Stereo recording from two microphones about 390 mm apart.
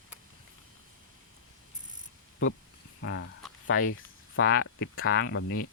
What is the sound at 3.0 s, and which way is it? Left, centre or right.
Speech, left.